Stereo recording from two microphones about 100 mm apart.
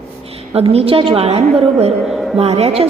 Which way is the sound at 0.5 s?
85° right.